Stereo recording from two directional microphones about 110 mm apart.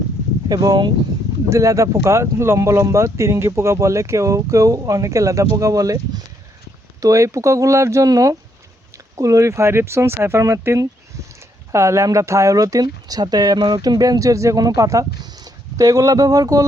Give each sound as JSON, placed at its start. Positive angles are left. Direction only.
{"t": 0.4, "sound": "speech", "side_deg": -35}